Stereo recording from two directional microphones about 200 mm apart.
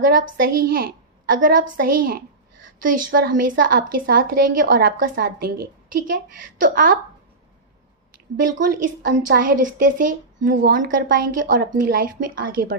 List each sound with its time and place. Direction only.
0.0 s a woman's voice: 45° right (ahead or behind)
8.6 s a woman's voice: 40° right (ahead or behind)